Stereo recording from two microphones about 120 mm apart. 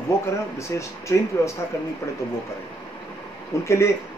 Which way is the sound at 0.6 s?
25° left (ahead or behind).